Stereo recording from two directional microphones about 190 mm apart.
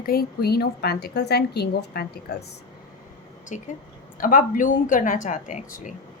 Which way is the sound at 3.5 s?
40° left (ahead or behind).